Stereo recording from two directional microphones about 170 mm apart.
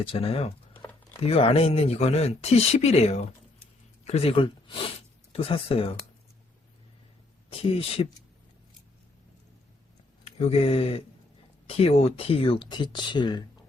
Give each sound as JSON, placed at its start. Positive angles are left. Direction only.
{"t": 0.0, "sound": "speech", "side_deg": 35}
{"t": 7.6, "sound": "speech", "side_deg": 35}
{"t": 10.2, "sound": "speech", "side_deg": 35}